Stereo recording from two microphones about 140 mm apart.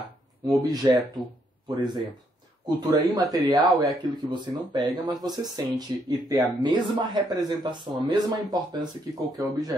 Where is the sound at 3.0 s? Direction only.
25° right (ahead or behind).